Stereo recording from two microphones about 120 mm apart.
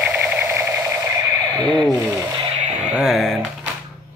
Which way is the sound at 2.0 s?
25° right (ahead or behind).